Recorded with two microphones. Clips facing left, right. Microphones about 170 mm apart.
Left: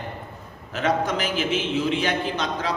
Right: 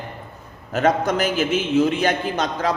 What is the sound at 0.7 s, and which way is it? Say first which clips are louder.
A man's voice: right 4 dB; 45° right (ahead or behind).